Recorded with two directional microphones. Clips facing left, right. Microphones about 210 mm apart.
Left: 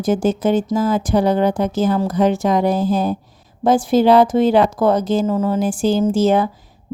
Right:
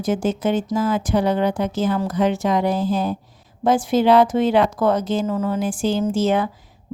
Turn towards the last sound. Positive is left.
turn(degrees=35)  # may be behind; listen again after turning